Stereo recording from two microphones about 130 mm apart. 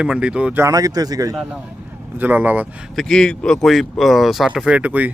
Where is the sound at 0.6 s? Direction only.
25° right (ahead or behind).